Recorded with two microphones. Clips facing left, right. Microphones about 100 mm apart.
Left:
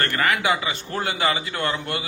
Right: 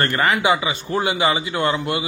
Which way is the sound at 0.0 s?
25° right (ahead or behind).